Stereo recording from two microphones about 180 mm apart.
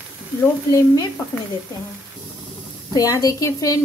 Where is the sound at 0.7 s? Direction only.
20° left (ahead or behind).